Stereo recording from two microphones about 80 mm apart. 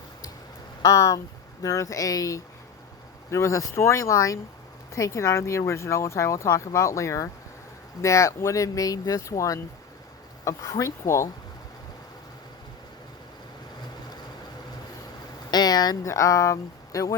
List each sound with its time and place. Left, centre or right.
0.8 s speech: left
15.4 s a sound: left
16.0 s speech: left